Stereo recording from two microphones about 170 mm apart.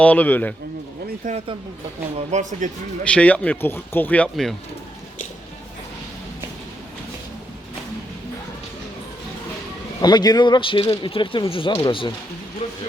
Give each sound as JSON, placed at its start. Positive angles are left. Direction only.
{"t": 0.0, "sound": "speech", "side_deg": 10}
{"t": 1.2, "sound": "speech", "side_deg": -50}
{"t": 3.0, "sound": "speech", "side_deg": 5}
{"t": 10.0, "sound": "a man's voice", "side_deg": 25}